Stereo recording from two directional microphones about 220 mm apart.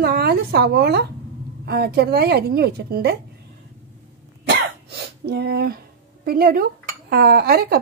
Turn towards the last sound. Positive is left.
turn(degrees=-45)  # may be behind; listen again after turning